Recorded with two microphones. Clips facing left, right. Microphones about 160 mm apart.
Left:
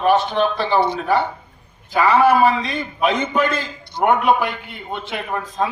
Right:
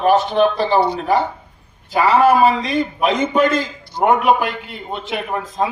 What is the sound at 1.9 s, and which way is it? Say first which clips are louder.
Speech: right 1 dB; 15° right (ahead or behind).